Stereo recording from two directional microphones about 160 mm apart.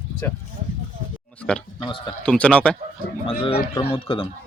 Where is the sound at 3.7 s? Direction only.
15° left (ahead or behind).